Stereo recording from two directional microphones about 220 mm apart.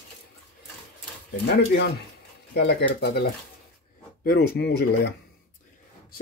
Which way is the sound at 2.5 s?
50° left (ahead or behind).